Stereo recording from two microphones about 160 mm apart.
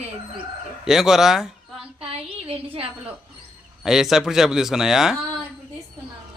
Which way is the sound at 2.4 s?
35° right (ahead or behind).